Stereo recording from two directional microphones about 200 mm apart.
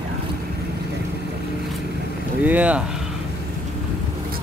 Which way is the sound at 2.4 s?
5° right (ahead or behind).